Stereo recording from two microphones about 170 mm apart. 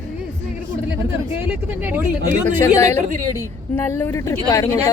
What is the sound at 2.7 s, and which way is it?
A woman's voice, 15° left (ahead or behind).